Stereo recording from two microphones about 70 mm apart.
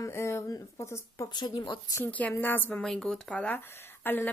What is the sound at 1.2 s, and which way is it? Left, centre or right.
Speech, left.